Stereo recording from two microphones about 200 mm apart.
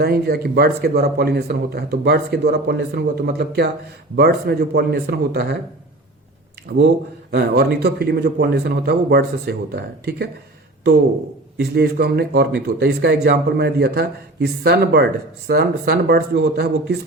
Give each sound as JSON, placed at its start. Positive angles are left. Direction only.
{"t": 0.0, "sound": "a man's voice", "side_deg": -50}
{"t": 7.3, "sound": "a man's voice", "side_deg": -55}
{"t": 11.5, "sound": "a man's voice", "side_deg": -55}